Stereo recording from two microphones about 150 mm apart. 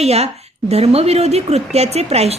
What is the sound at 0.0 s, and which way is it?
A woman's voice, 45° right (ahead or behind).